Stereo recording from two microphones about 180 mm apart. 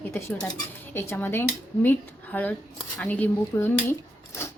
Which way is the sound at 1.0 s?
10° left (ahead or behind).